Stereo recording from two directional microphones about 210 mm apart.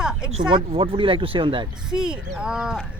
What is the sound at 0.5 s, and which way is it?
Speech, 25° right (ahead or behind).